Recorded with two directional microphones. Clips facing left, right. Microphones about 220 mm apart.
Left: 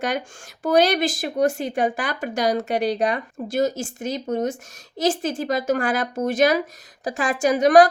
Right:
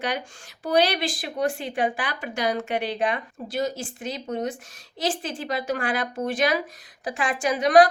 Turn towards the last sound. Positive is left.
turn(degrees=45)  # may be behind; listen again after turning